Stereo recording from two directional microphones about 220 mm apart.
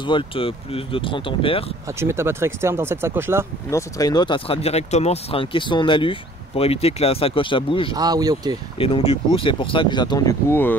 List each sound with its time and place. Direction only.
0.0 s speech: 20° left (ahead or behind)
1.9 s speech: 10° right (ahead or behind)
3.7 s speech: 15° left (ahead or behind)
7.9 s speech: 15° right (ahead or behind)
8.7 s speech: 25° left (ahead or behind); by 10.8 s 10° left (ahead or behind)